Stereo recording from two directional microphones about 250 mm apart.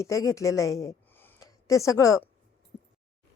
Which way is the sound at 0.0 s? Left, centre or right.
Centre.